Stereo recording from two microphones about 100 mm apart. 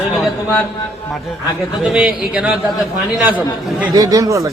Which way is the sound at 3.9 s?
40° right (ahead or behind).